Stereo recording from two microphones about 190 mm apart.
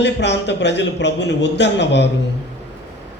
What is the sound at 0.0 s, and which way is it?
A man's voice, 65° left (ahead or behind).